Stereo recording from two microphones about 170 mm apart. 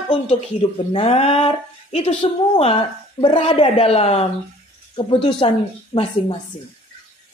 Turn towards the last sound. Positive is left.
turn(degrees=30)  # may be behind; listen again after turning